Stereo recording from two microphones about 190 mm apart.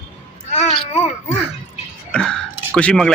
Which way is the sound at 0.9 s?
35° left (ahead or behind).